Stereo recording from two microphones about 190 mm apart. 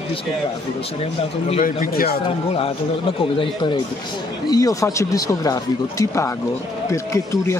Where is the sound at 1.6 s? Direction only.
45° left (ahead or behind).